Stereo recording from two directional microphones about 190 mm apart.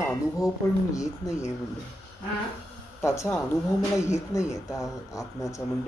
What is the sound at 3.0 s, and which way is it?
Speech, 15° left (ahead or behind).